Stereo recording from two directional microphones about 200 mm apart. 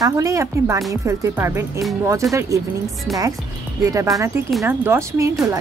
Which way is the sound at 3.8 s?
15° right (ahead or behind).